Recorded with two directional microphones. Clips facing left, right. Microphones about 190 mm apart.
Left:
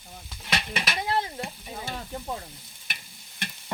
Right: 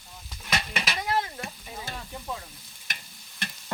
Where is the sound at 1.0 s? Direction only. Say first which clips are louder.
Left 1 dB; 25° left (ahead or behind).